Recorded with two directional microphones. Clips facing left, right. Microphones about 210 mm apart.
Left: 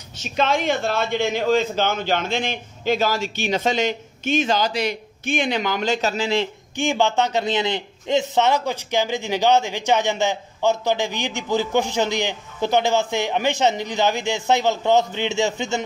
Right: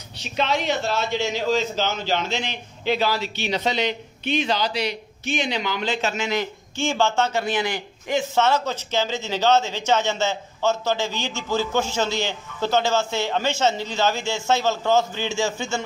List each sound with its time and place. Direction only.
0.2 s a man's voice: 50° left (ahead or behind); by 6.5 s 30° left (ahead or behind)
6.8 s a man's voice: 15° left (ahead or behind)